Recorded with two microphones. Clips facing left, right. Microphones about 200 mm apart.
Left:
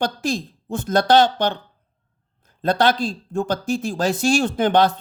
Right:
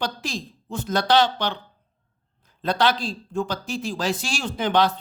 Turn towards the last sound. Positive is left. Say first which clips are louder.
# left 4 dB
turn(degrees=50)  # may be behind; listen again after turning